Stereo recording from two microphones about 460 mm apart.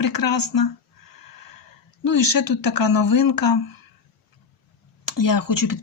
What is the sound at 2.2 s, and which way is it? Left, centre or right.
Speech, left.